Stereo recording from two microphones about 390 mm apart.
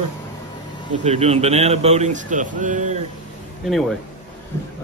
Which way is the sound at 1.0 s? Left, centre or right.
Centre.